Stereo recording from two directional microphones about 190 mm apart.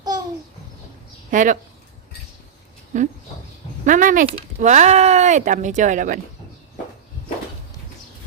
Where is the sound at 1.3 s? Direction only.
45° right (ahead or behind).